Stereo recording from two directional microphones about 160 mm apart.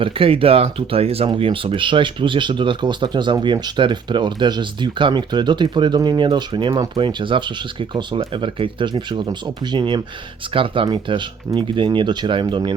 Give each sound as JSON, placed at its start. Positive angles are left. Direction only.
{"t": 0.0, "sound": "speech", "side_deg": -35}